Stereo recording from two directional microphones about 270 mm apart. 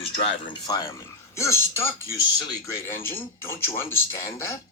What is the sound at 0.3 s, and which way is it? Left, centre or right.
Speech, centre.